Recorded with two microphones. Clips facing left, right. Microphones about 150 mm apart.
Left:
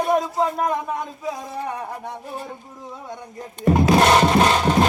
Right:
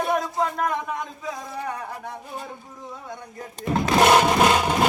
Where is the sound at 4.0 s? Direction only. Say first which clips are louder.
Right 4 dB; 10° right (ahead or behind).